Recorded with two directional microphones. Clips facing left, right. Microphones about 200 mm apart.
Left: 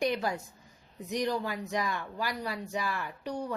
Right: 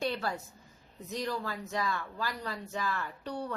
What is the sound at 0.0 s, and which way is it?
A woman's voice, 15° left (ahead or behind).